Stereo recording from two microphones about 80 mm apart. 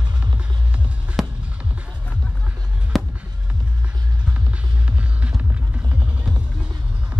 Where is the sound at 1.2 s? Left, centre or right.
Centre.